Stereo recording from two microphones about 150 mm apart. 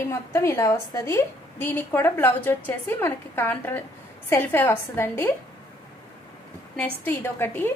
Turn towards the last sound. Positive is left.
turn(degrees=15)  # may be behind; listen again after turning